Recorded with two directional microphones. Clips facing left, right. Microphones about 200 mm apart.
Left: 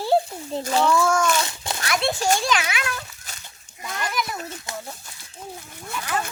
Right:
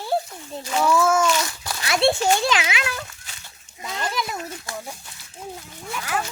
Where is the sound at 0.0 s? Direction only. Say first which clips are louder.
Left 4 dB; 30° left (ahead or behind).